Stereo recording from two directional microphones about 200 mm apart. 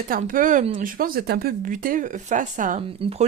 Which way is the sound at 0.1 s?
45° right (ahead or behind).